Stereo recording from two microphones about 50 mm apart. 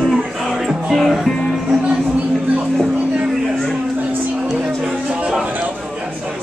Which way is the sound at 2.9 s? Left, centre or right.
Right.